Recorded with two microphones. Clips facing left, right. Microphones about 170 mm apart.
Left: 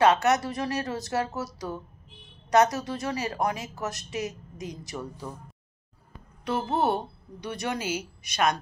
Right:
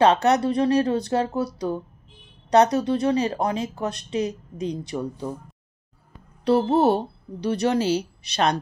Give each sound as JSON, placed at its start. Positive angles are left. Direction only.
{"t": 0.0, "sound": "speech", "side_deg": -30}
{"t": 6.4, "sound": "speech", "side_deg": -30}